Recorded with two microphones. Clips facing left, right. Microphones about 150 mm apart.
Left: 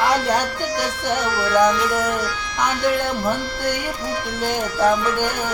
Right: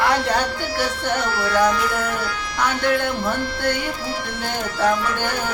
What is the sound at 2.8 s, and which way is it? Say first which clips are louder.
Speech: left 1 dB; 10° left (ahead or behind).